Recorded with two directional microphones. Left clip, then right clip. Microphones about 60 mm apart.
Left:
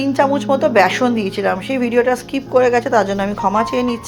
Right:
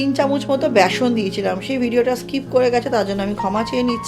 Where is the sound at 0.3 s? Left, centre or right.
Right.